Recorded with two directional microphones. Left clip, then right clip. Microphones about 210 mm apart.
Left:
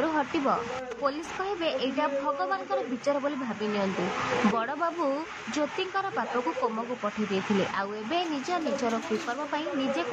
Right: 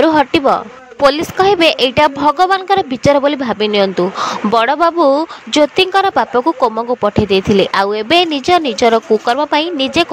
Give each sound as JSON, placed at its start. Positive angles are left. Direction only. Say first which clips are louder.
{"t": 0.0, "sound": "a woman's voice", "louder": "right 17 dB", "side_deg": -50}
{"t": 7.7, "sound": "a woman's voice", "louder": "right 18 dB", "side_deg": -50}